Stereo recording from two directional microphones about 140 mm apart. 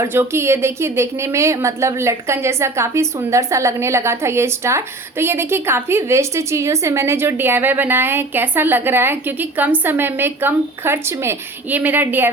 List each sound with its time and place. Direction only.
0.0 s a woman's voice: 20° right (ahead or behind)